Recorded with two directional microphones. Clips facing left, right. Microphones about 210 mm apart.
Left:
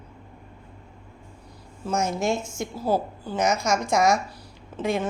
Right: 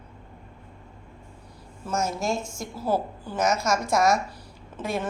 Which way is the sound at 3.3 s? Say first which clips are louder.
Left 1 dB; 5° right (ahead or behind).